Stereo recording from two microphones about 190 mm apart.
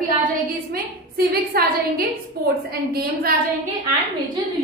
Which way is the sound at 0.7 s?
55° right (ahead or behind).